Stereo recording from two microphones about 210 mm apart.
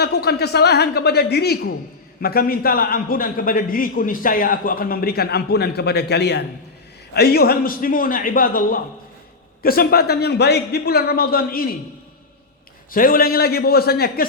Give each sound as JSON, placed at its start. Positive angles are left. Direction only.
{"t": 0.0, "sound": "a man's voice", "side_deg": 50}
{"t": 12.9, "sound": "a man's voice", "side_deg": 40}